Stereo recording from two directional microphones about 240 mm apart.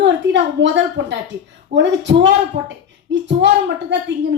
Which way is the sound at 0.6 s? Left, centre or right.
Right.